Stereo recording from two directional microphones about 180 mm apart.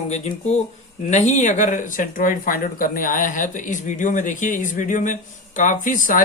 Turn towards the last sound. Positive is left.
turn(degrees=45)  # may be behind; listen again after turning